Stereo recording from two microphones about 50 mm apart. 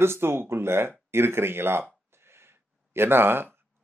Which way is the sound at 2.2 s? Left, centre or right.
Right.